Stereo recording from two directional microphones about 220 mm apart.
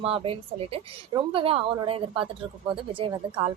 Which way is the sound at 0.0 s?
25° right (ahead or behind).